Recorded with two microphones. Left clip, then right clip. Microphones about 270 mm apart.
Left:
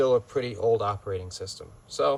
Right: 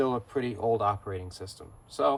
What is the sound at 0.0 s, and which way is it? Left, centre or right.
Speech, centre.